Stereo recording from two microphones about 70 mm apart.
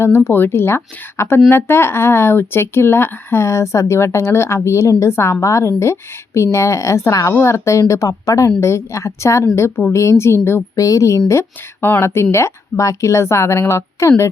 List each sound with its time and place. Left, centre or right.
0.3 s speech: left
10.8 s speech: left
11.3 s speech: left